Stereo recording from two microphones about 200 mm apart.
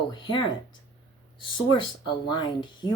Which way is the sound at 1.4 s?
25° left (ahead or behind).